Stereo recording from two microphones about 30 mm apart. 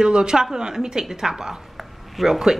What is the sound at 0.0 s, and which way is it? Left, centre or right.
A woman's voice, right.